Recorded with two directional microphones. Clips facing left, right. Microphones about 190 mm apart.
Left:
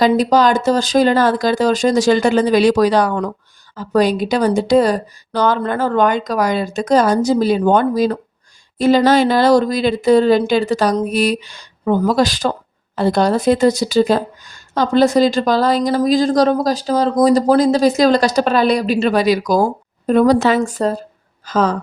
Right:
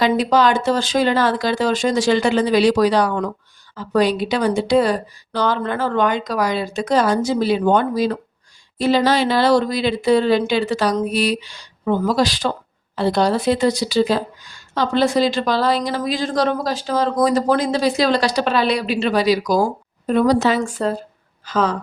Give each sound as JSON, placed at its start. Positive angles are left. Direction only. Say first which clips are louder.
{"t": 0.0, "sound": "speech", "louder": "left 3 dB", "side_deg": 40}
{"t": 20.7, "sound": "speech", "louder": "left 3 dB", "side_deg": 40}